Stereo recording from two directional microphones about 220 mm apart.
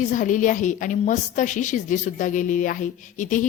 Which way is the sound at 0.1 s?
35° left (ahead or behind).